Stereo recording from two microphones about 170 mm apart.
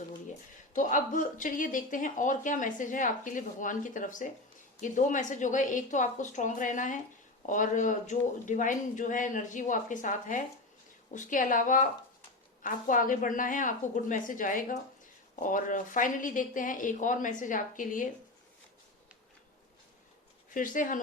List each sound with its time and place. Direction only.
0.7 s speech: 50° left (ahead or behind)
20.5 s speech: 50° left (ahead or behind)